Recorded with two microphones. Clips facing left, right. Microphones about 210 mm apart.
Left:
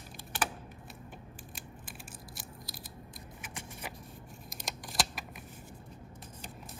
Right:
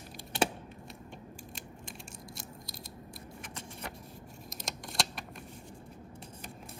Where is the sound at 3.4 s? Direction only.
5° left (ahead or behind).